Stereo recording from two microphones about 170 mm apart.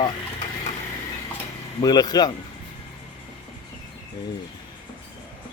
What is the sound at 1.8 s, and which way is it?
Speech, 25° left (ahead or behind).